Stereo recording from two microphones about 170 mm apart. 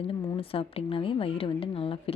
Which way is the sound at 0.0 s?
30° left (ahead or behind).